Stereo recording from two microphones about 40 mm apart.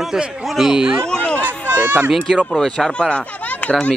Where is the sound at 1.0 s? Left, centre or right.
Centre.